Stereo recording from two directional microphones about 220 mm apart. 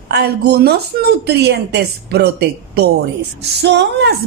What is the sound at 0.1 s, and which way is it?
A woman's voice, 45° right (ahead or behind).